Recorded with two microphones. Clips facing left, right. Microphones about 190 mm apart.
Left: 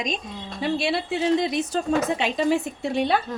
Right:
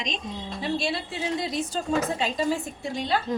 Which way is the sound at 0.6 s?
65° left (ahead or behind).